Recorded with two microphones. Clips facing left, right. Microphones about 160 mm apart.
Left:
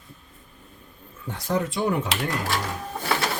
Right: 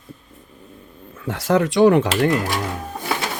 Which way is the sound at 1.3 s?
90° right.